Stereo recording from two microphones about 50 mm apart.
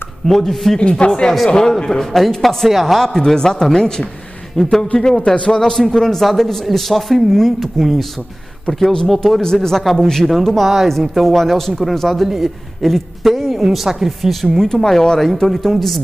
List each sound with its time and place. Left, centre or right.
0.3 s speech: centre
0.7 s speech: left
2.1 s speech: centre
9.0 s speech: centre